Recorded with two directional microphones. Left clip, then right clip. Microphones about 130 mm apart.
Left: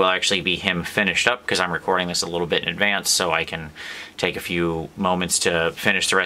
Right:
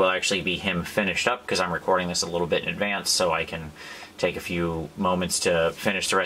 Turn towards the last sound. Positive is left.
turn(degrees=40)  # may be behind; listen again after turning